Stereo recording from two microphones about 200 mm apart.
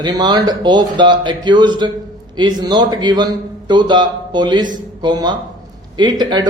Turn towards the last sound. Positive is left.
turn(degrees=-20)  # may be behind; listen again after turning